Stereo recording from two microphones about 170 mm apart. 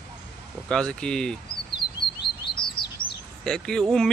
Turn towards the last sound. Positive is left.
turn(degrees=5)  # may be behind; listen again after turning